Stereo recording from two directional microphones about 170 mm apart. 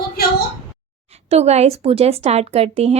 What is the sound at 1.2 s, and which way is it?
A woman's voice, 40° right (ahead or behind).